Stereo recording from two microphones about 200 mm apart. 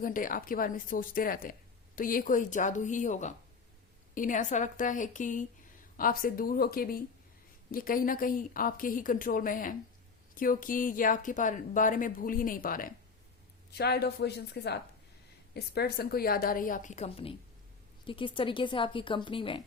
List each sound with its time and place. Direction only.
0.0 s a woman's voice: 45° left (ahead or behind); by 19.6 s 25° left (ahead or behind)